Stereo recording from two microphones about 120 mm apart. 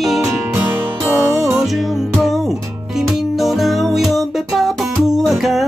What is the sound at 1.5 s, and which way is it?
Music, centre (ahead or behind).